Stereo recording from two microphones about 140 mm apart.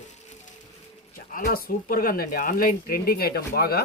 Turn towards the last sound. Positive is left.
turn(degrees=90)